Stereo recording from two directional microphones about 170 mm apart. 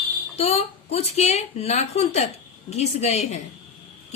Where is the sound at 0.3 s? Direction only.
35° left (ahead or behind).